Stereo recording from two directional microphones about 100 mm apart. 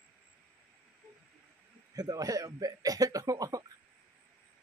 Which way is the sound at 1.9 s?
40° right (ahead or behind).